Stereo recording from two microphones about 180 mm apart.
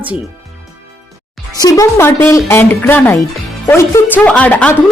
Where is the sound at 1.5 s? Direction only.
20° left (ahead or behind).